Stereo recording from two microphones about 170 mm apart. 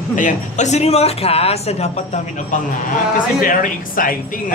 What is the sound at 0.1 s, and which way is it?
A man's voice, 45° left (ahead or behind).